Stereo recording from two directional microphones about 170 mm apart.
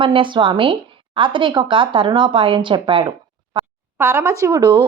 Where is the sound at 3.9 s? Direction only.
15° right (ahead or behind).